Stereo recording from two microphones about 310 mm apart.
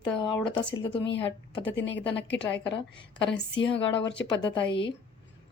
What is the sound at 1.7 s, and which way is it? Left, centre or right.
Speech, left.